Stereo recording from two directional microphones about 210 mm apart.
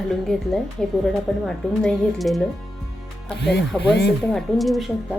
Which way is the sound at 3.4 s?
50° left (ahead or behind).